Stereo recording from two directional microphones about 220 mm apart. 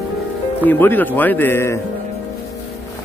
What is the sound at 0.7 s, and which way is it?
A man's voice, 10° left (ahead or behind).